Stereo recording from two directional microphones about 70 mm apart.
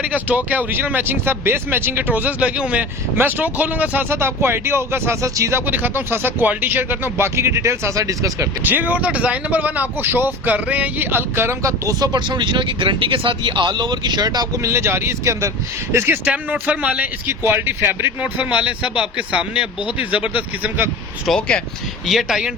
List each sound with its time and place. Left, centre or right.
0.0 s speech: right
4.1 s speech: right
5.6 s speech: right
7.3 s speech: right
8.6 s speech: right
11.9 s speech: right
14.6 s speech: right
16.2 s speech: right
17.2 s speech: right
18.2 s speech: centre
21.2 s speech: centre
22.0 s speech: centre